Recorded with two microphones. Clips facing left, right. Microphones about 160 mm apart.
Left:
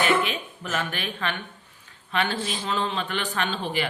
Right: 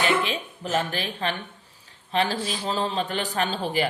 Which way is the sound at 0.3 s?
35° right (ahead or behind).